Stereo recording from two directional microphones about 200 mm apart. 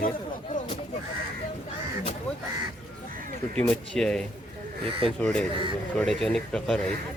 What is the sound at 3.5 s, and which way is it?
A man's voice, 5° left (ahead or behind).